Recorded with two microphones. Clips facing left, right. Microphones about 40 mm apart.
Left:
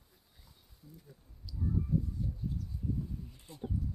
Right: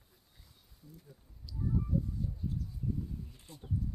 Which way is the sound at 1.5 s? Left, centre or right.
Centre.